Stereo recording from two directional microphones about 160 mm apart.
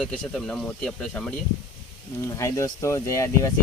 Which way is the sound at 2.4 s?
20° left (ahead or behind).